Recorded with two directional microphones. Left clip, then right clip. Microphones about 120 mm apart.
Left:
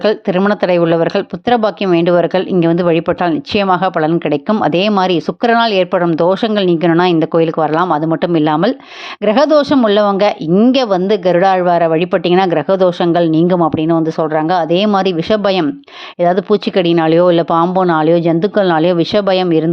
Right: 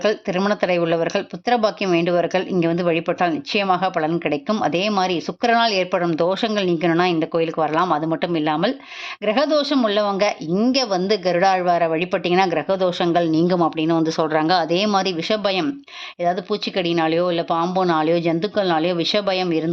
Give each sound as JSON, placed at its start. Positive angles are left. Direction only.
{"t": 0.0, "sound": "speech", "side_deg": 40}
{"t": 8.2, "sound": "speech", "side_deg": 50}
{"t": 16.2, "sound": "speech", "side_deg": 75}
{"t": 17.6, "sound": "speech", "side_deg": 50}
{"t": 19.5, "sound": "speech", "side_deg": 40}